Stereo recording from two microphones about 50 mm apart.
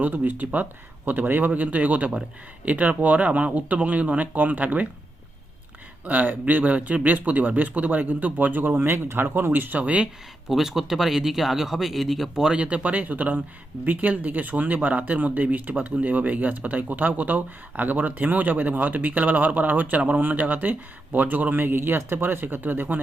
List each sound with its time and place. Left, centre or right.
0.0 s speech: right
6.1 s speech: right
10.5 s speech: centre
12.5 s speech: right